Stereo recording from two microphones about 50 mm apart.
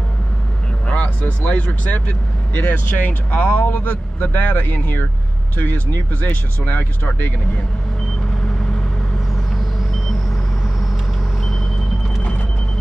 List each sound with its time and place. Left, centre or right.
0.8 s speech: left
9.6 s vehicle: centre
12.2 s a sound: left